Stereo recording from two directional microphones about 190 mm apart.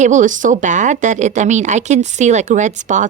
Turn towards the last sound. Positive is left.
turn(degrees=-40)  # may be behind; listen again after turning